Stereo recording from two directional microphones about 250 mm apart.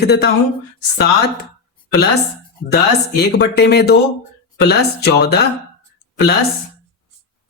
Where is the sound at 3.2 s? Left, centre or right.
Left.